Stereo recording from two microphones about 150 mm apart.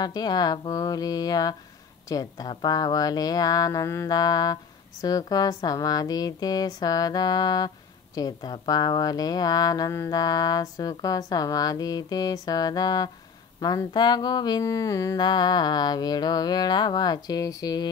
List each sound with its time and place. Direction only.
0.0 s speech: 25° left (ahead or behind)